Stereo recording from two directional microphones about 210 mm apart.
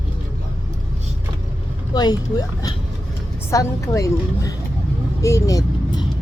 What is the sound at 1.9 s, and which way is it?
A woman's voice, 20° left (ahead or behind).